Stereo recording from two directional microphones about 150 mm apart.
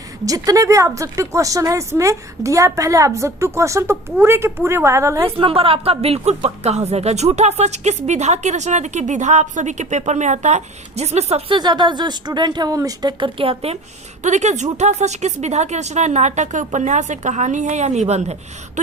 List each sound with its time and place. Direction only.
0.3 s a woman's voice: 25° right (ahead or behind)
5.4 s speech: 40° right (ahead or behind)
14.2 s speech: 50° right (ahead or behind)